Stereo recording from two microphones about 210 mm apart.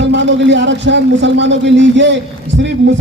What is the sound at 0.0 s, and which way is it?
A man's voice, 60° right (ahead or behind).